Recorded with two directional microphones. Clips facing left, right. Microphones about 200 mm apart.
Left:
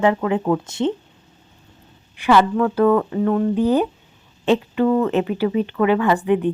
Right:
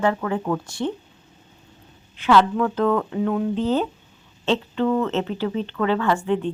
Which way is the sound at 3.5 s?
10° left (ahead or behind).